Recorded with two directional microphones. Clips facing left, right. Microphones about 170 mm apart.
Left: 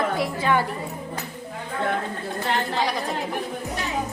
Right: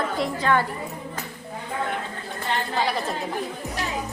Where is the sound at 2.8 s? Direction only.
Centre (ahead or behind).